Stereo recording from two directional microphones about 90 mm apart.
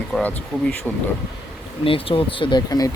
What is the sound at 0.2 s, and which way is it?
Speech, 20° left (ahead or behind).